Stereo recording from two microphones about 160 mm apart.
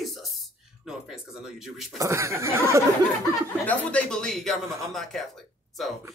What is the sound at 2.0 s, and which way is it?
Speech, 15° right (ahead or behind).